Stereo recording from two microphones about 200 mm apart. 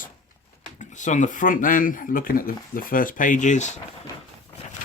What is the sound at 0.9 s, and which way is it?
Speech, 40° left (ahead or behind).